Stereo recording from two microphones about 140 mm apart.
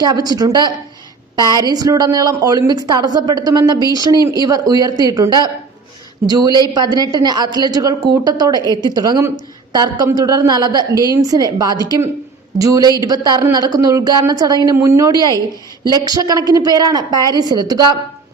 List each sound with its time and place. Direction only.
0.0 s a woman's voice: 30° right (ahead or behind)